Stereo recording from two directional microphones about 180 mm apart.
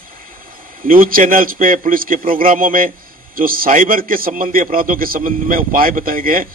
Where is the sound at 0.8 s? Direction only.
50° right (ahead or behind).